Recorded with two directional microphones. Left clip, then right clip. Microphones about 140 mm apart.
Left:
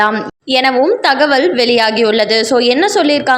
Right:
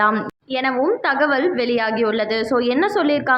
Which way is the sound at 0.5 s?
35° left (ahead or behind).